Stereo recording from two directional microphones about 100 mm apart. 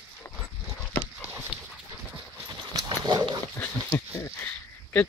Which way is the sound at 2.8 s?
45° right (ahead or behind).